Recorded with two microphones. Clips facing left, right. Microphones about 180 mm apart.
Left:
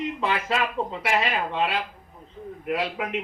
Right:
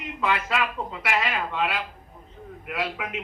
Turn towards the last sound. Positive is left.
turn(degrees=30)  # may be behind; listen again after turning